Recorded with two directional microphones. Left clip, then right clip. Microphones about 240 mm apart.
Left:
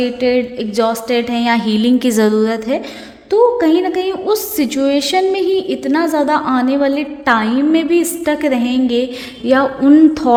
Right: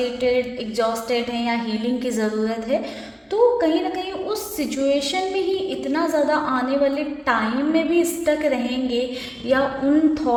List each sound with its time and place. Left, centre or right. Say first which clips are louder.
0.0 s a woman's voice: left 5 dB; left